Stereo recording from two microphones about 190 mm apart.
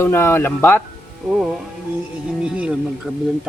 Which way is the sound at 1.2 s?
5° right (ahead or behind).